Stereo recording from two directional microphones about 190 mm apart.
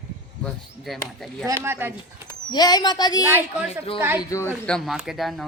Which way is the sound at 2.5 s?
20° left (ahead or behind).